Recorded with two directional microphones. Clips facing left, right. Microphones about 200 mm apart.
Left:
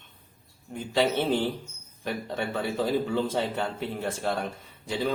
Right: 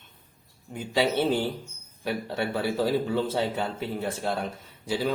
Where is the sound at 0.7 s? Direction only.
10° right (ahead or behind).